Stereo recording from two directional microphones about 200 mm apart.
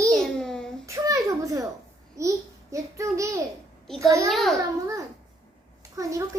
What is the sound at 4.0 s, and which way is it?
Child singing, 15° right (ahead or behind).